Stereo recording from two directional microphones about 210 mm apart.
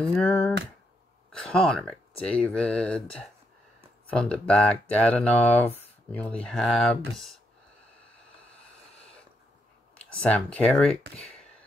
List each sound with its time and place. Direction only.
0.0 s speech: 5° left (ahead or behind)
9.9 s speech: 5° left (ahead or behind)